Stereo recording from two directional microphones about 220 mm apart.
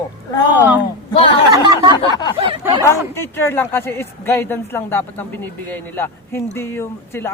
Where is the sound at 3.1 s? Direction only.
10° left (ahead or behind).